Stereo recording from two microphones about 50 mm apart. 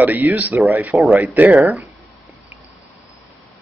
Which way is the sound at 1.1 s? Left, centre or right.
Right.